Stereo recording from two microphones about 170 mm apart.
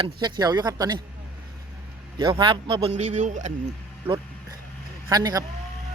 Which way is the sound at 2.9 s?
45° right (ahead or behind).